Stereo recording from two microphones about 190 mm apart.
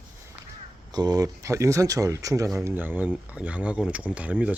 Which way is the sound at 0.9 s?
20° right (ahead or behind).